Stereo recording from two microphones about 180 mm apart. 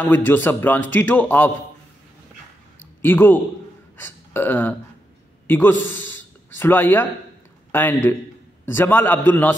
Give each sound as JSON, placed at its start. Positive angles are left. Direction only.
{"t": 0.0, "sound": "a man's voice", "side_deg": 10}
{"t": 3.0, "sound": "speech", "side_deg": 10}
{"t": 4.0, "sound": "burping", "side_deg": 10}
{"t": 5.5, "sound": "a man's voice", "side_deg": 10}
{"t": 5.9, "sound": "a sound", "side_deg": 10}
{"t": 7.7, "sound": "a man's voice", "side_deg": 10}